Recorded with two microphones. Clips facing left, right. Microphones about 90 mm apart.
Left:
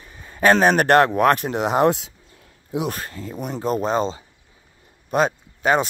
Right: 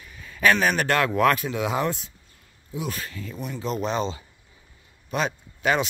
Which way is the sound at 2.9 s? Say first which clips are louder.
Left 4 dB; 45° left (ahead or behind).